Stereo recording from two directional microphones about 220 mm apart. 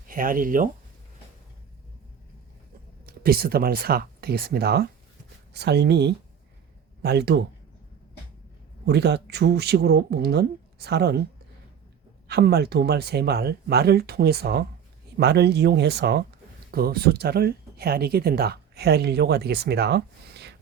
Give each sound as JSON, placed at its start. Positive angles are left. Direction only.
{"t": 0.1, "sound": "speech", "side_deg": -40}
{"t": 3.1, "sound": "speech", "side_deg": -45}
{"t": 8.9, "sound": "speech", "side_deg": -50}
{"t": 12.3, "sound": "speech", "side_deg": -45}